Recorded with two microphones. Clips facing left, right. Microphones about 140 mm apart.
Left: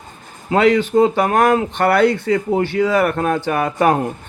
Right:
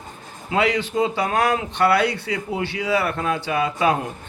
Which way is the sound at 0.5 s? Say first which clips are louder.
Left 7 dB; 50° left (ahead or behind).